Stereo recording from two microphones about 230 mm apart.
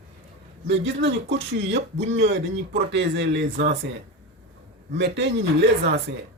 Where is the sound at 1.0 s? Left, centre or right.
Right.